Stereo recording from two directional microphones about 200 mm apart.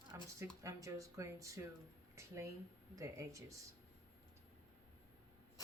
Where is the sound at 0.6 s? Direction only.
15° right (ahead or behind).